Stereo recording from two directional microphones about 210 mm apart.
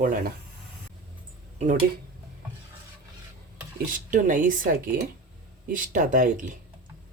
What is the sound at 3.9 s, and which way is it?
Speech, 40° right (ahead or behind).